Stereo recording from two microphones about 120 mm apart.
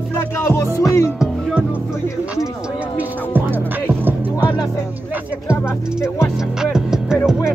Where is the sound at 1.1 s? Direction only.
5° right (ahead or behind).